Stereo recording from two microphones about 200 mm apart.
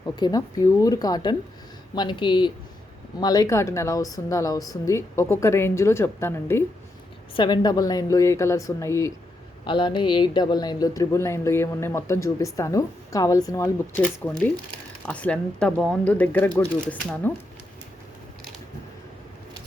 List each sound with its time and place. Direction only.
0.0 s a woman's voice: 20° left (ahead or behind)
13.9 s a woman's voice: 5° left (ahead or behind)